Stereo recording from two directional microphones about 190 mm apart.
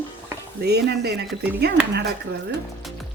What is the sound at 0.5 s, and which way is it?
Speech, 60° right (ahead or behind).